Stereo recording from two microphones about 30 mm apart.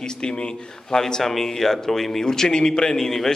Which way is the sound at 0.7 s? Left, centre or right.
Centre.